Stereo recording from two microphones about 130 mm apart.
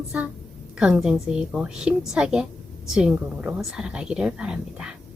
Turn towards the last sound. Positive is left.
turn(degrees=-5)  # may be behind; listen again after turning